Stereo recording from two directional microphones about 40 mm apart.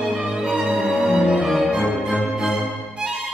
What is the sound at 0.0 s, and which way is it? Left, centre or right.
Music, centre.